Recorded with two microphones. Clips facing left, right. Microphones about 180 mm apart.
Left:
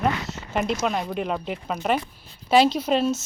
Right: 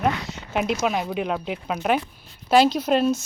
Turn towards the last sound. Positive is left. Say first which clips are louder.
# right 2 dB
turn(degrees=0)  # may be behind; listen again after turning